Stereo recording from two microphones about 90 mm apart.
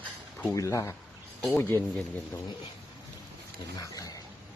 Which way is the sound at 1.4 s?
5° left (ahead or behind).